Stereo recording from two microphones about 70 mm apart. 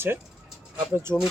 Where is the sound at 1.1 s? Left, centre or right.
Centre.